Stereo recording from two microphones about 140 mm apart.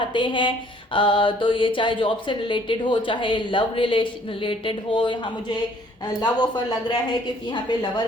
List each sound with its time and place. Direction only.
0.1 s speech: 35° left (ahead or behind)